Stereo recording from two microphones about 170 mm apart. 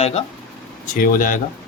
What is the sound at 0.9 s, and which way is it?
Speech, 55° left (ahead or behind).